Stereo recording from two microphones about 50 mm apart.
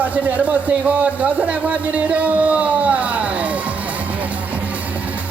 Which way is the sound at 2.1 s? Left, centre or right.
Right.